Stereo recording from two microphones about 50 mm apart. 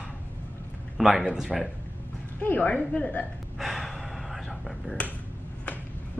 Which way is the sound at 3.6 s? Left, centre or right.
Centre.